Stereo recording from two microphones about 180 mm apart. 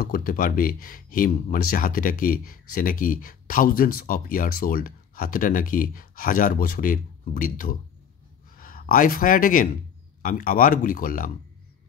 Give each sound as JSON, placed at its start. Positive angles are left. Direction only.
{"t": 0.0, "sound": "a man's voice", "side_deg": 55}